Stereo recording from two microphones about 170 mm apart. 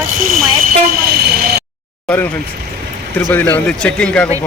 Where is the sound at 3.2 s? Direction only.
10° left (ahead or behind).